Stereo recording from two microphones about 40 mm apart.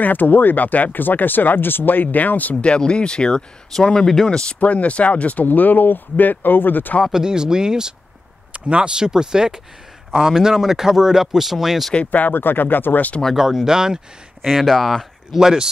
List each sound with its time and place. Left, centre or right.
0.0 s speech: left
2.8 s speech: left
4.6 s speech: left
7.1 s speech: centre
8.5 s speech: right
8.9 s speech: centre
12.1 s speech: left
13.4 s speech: centre
14.4 s speech: centre
15.3 s speech: centre